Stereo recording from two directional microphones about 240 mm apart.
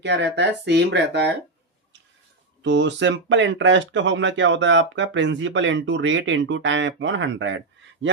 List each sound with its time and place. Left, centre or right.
0.0 s speech: right
2.6 s speech: right